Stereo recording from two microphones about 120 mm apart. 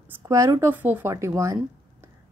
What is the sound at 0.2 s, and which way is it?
Speech, 25° right (ahead or behind).